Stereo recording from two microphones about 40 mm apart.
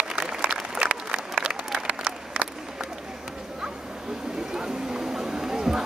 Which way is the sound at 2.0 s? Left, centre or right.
Right.